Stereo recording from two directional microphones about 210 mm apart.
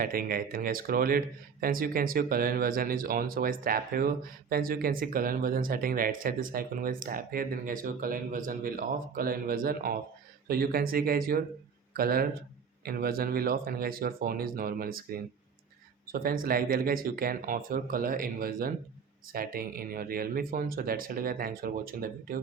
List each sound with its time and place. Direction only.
0.0 s speech: 45° right (ahead or behind)